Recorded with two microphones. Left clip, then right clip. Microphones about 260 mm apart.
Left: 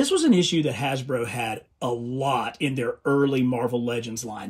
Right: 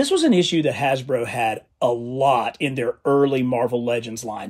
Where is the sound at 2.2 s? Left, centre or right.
Right.